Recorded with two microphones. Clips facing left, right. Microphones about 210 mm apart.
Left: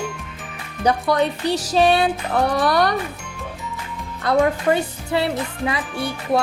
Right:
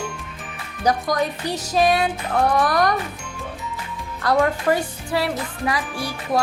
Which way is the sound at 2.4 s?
35° left (ahead or behind).